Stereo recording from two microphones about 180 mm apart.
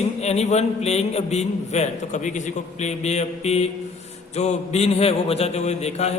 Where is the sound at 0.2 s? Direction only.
40° left (ahead or behind).